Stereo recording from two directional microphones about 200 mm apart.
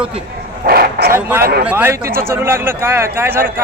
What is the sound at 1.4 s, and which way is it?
Speech, 50° right (ahead or behind).